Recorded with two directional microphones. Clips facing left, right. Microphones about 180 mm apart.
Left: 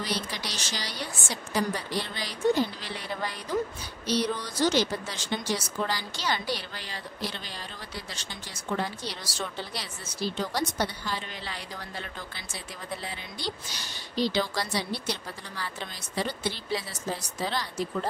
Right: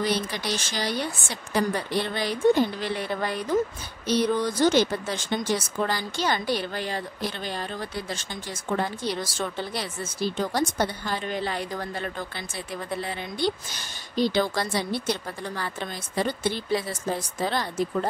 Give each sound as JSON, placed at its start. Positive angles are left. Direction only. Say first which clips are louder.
{"t": 0.0, "sound": "a woman's voice", "louder": "right 6 dB", "side_deg": -55}